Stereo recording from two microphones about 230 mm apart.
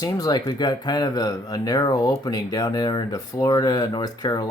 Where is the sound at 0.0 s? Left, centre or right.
Centre.